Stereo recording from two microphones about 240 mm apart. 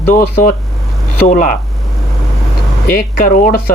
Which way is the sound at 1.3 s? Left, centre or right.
Left.